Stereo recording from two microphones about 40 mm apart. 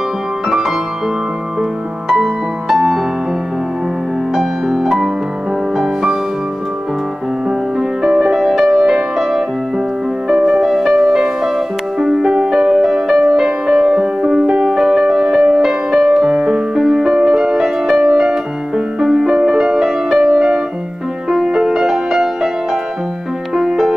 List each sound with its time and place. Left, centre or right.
0.5 s music: centre
4.4 s music: centre
8.0 s music: centre
10.2 s music: centre
18.0 s music: right
18.9 s music: centre
23.5 s music: centre